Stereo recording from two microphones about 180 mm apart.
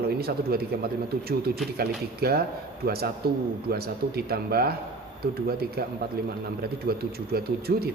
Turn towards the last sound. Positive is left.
turn(degrees=-60)  # may be behind; listen again after turning